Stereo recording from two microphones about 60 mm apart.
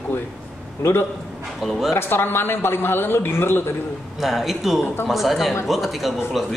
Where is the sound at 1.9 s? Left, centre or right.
Left.